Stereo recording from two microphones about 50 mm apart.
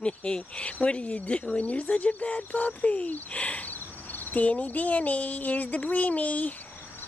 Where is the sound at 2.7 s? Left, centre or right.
Left.